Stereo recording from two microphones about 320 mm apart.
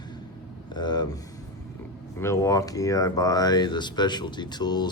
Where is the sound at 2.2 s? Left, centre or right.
Centre.